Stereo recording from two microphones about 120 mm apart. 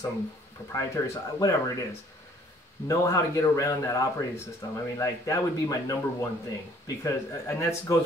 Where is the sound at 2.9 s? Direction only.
25° left (ahead or behind).